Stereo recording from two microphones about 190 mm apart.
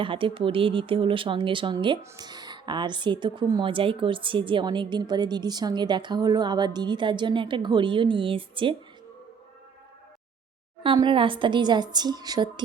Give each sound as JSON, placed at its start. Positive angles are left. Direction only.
{"t": 0.0, "sound": "speech", "side_deg": -25}
{"t": 10.8, "sound": "speech", "side_deg": -25}